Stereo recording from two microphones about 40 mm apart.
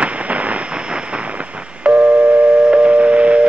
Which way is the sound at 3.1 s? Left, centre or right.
Right.